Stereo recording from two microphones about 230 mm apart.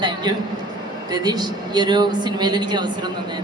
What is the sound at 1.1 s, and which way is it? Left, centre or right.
A man's voice, centre.